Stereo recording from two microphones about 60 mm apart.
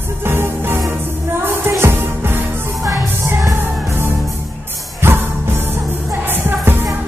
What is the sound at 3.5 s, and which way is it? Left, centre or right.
Music, right.